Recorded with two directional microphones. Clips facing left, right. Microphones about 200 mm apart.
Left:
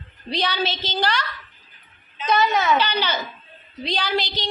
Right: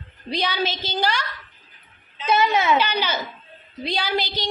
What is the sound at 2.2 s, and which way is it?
A woman's voice, 10° right (ahead or behind).